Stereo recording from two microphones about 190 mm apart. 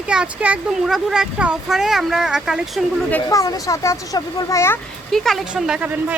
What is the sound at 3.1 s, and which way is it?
Speech, 15° left (ahead or behind).